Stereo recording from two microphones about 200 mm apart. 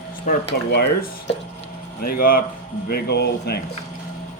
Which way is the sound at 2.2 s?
45° left (ahead or behind).